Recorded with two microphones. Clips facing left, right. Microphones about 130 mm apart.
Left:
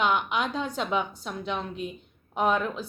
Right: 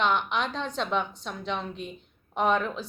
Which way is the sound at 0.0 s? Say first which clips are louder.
Left 1 dB; 5° left (ahead or behind).